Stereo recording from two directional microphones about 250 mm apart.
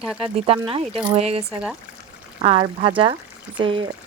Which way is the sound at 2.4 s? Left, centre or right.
Right.